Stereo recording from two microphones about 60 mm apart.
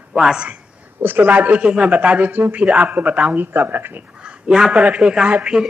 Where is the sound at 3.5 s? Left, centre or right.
Right.